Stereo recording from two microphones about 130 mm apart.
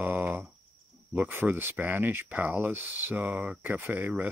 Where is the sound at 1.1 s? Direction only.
15° right (ahead or behind).